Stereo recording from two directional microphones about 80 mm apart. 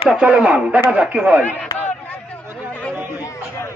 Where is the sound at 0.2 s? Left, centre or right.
Centre.